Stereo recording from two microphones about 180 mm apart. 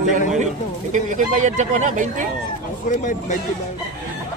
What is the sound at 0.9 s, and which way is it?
Speech, 45° right (ahead or behind).